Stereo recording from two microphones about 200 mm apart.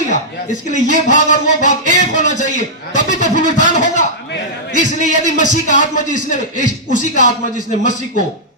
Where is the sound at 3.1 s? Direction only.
40° left (ahead or behind).